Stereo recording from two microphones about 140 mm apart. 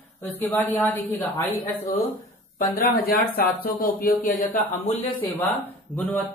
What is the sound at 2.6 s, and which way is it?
Speech, 90° left.